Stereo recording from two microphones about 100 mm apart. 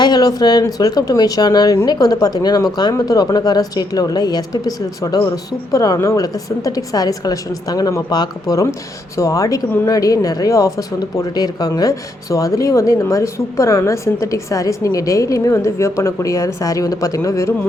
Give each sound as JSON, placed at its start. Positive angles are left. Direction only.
{"t": 0.0, "sound": "speech", "side_deg": 40}